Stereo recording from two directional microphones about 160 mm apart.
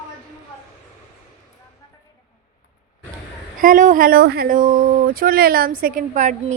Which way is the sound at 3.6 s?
55° right (ahead or behind).